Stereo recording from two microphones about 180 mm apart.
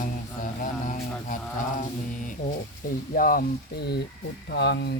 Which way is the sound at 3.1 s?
50° left (ahead or behind).